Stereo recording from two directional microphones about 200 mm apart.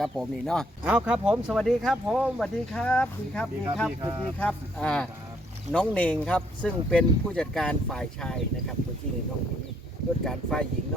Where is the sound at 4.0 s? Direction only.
25° right (ahead or behind).